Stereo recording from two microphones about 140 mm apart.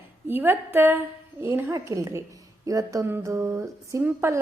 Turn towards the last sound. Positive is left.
turn(degrees=-20)  # may be behind; listen again after turning